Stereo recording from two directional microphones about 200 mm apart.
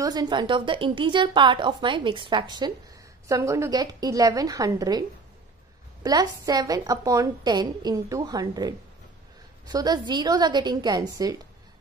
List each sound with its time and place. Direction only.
0.0 s a woman's voice: 20° right (ahead or behind)
6.0 s a woman's voice: 20° right (ahead or behind)